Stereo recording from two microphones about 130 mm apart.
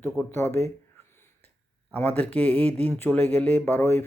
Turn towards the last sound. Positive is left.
turn(degrees=15)  # may be behind; listen again after turning